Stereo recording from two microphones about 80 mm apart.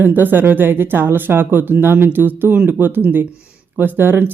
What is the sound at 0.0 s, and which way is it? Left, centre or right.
Speech, right.